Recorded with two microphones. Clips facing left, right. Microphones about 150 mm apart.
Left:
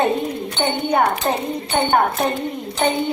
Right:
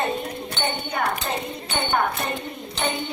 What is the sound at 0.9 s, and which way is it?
Speech, 65° left (ahead or behind).